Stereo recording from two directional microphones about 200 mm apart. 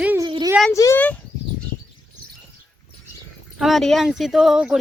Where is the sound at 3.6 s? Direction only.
Centre (ahead or behind).